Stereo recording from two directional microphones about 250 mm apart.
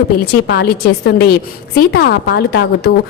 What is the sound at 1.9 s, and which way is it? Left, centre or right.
Speech, left.